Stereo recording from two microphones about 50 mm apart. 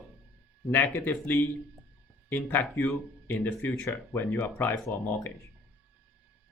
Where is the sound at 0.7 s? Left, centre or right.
Left.